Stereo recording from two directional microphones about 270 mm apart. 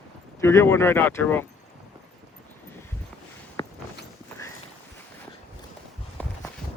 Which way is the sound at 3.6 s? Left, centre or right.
Centre.